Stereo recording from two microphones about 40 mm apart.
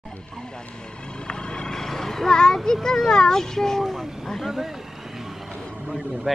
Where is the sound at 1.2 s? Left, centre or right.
Left.